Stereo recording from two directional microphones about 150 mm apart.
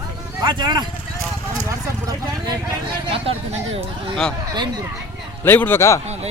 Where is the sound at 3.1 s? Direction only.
40° right (ahead or behind).